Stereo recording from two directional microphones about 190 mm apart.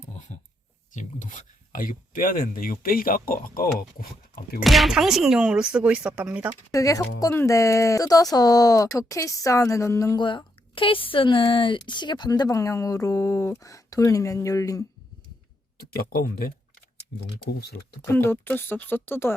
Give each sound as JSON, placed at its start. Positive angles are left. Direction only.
{"t": 0.3, "sound": "a sound", "side_deg": 40}
{"t": 0.9, "sound": "speech", "side_deg": 40}
{"t": 4.6, "sound": "speech", "side_deg": 0}
{"t": 6.7, "sound": "speech", "side_deg": 15}
{"t": 16.0, "sound": "speech", "side_deg": 50}
{"t": 18.0, "sound": "speech", "side_deg": 10}